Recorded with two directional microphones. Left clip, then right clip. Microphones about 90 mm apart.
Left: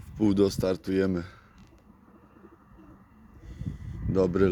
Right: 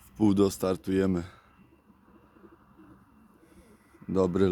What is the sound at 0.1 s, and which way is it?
Speech, 50° right (ahead or behind).